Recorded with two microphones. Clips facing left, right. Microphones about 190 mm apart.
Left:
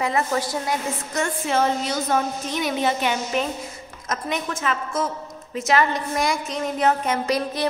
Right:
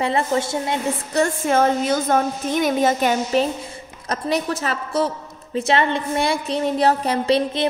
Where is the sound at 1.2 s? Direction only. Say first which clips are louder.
Right 4 dB; 50° right (ahead or behind).